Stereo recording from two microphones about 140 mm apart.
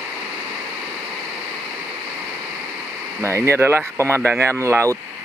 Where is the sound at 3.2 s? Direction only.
20° right (ahead or behind).